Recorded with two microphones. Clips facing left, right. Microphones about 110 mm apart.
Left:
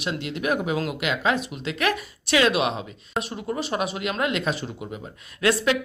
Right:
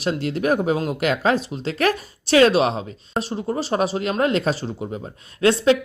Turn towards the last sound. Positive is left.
turn(degrees=-30)  # may be behind; listen again after turning